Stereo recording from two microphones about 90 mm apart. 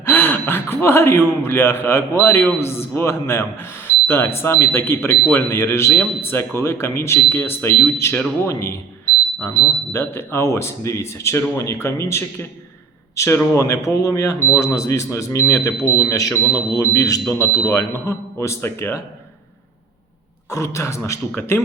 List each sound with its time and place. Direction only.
0.0 s speech: 20° left (ahead or behind)
9.9 s speech: 25° left (ahead or behind)
20.5 s speech: 35° left (ahead or behind)